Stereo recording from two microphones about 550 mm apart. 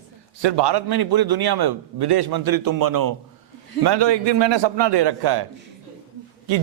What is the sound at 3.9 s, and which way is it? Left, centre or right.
A man's voice, right.